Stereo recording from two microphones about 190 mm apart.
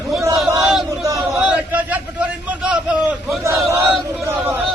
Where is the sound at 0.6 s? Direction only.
Centre (ahead or behind).